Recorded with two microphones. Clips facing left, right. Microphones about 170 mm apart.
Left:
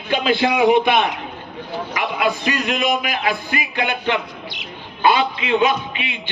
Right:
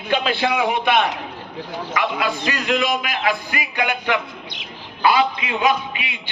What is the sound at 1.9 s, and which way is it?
A man's voice, 20° left (ahead or behind).